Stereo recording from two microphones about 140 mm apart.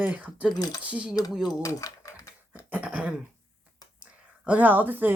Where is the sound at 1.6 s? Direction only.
25° left (ahead or behind).